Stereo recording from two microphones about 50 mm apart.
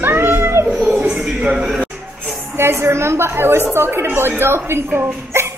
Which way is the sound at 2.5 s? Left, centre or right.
Right.